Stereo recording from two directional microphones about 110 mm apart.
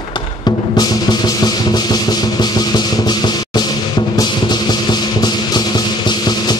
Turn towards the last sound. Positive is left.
turn(degrees=40)  # may be behind; listen again after turning